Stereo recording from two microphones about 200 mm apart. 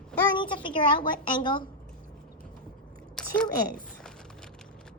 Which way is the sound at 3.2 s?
5° left (ahead or behind).